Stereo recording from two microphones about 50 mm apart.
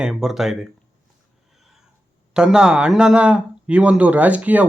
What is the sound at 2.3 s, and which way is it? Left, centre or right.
A man's voice, centre.